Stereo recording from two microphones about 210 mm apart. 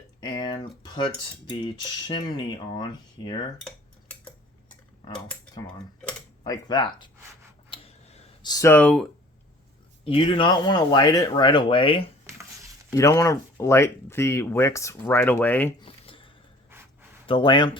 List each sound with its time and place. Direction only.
0.3 s speech: 20° left (ahead or behind)
5.1 s speech: 5° left (ahead or behind)
6.4 s speech: 20° left (ahead or behind)
7.7 s clicking: 25° left (ahead or behind); by 9.0 s 5° left (ahead or behind)
10.0 s speech: 25° left (ahead or behind); by 15.7 s 10° left (ahead or behind)
15.8 s a sound: 25° left (ahead or behind)
16.7 s gasp: 10° right (ahead or behind)
17.2 s speech: 25° left (ahead or behind)